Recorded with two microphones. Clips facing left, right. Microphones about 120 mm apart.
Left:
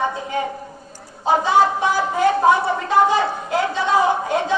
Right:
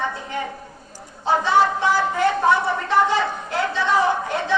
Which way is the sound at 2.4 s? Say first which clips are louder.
Left 3 dB; 15° left (ahead or behind).